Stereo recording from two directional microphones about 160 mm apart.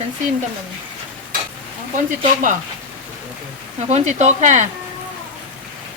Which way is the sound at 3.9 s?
45° right (ahead or behind).